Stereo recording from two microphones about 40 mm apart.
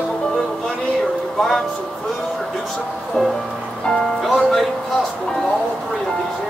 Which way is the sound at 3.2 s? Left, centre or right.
Left.